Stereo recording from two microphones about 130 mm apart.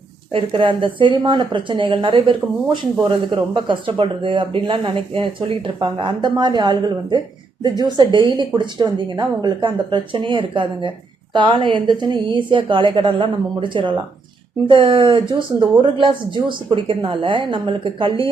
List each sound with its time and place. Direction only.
0.3 s speech: 40° right (ahead or behind)